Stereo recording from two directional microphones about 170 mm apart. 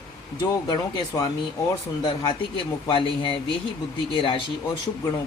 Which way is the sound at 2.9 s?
30° left (ahead or behind).